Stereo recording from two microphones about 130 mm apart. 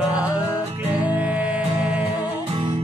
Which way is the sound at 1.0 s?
10° right (ahead or behind).